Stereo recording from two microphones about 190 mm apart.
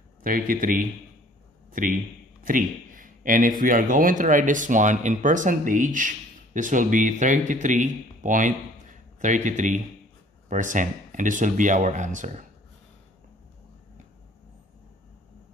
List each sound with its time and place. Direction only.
0.2 s a man's voice: 45° right (ahead or behind)